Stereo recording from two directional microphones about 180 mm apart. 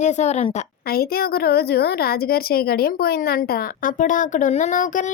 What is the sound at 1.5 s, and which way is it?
A woman's voice, 60° left (ahead or behind).